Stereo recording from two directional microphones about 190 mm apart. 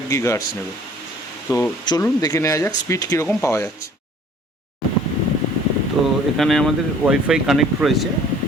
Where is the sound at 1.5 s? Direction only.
20° left (ahead or behind).